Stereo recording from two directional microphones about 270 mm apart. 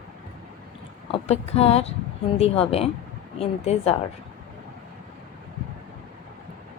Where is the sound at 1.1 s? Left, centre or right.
Left.